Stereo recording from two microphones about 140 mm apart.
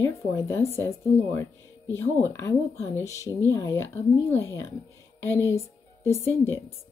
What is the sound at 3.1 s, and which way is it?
Speech, 25° right (ahead or behind).